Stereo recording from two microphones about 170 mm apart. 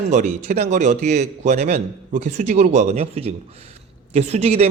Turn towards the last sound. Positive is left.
turn(degrees=-40)  # may be behind; listen again after turning